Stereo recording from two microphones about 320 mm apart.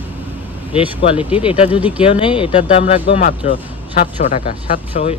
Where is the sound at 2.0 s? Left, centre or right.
Centre.